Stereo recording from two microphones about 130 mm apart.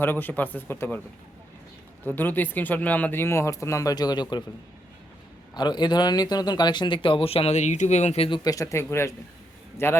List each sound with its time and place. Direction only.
0.0 s speech: 15° left (ahead or behind)
2.0 s speech: 15° left (ahead or behind); by 4.4 s 35° left (ahead or behind)
5.5 s speech: 35° left (ahead or behind); by 8.4 s 50° left (ahead or behind)
8.4 s speech: 25° left (ahead or behind)